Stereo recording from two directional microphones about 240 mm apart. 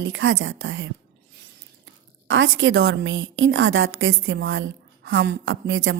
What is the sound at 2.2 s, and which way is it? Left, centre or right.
A woman's voice, right.